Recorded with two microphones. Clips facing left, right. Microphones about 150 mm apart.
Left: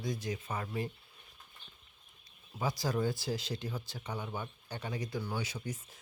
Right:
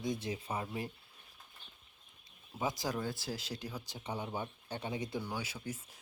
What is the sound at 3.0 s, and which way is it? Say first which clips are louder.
Speech: left 5 dB; centre (ahead or behind).